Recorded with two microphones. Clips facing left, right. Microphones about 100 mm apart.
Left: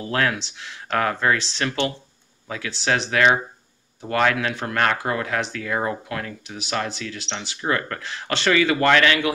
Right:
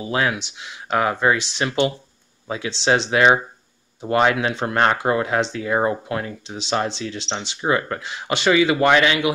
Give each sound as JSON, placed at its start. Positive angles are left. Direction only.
{"t": 0.0, "sound": "speech", "side_deg": -15}